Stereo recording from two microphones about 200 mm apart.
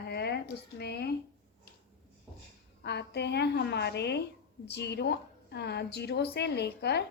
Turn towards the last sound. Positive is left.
turn(degrees=55)  # may be behind; listen again after turning